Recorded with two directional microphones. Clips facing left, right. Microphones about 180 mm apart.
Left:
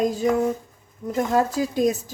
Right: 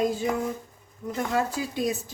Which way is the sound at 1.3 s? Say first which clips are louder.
Left 5 dB; 40° left (ahead or behind).